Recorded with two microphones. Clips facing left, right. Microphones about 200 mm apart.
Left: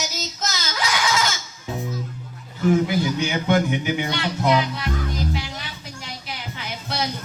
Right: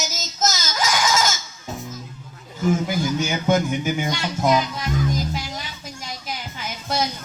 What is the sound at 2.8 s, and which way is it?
Music, 45° right (ahead or behind).